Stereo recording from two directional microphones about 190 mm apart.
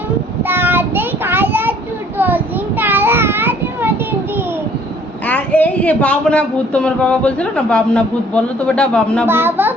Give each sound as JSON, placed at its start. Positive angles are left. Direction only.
{"t": 0.4, "sound": "child singing", "side_deg": -10}
{"t": 2.1, "sound": "a sound", "side_deg": -10}
{"t": 5.2, "sound": "speech", "side_deg": 10}
{"t": 9.2, "sound": "a child's voice", "side_deg": -10}